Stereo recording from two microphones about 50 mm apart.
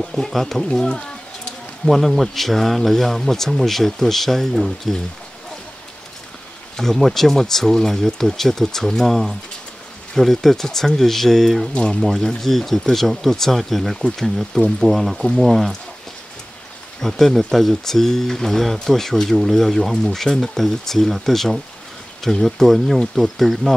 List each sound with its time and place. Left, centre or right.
0.1 s speech: centre
0.7 s speech: centre
1.9 s speech: centre
6.8 s speech: centre
11.7 s speech: left
12.0 s speech: centre
17.0 s speech: centre